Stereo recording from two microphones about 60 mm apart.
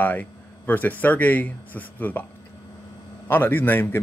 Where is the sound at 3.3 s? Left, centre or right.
Left.